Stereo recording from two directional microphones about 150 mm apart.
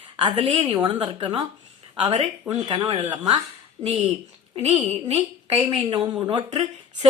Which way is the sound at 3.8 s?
45° right (ahead or behind).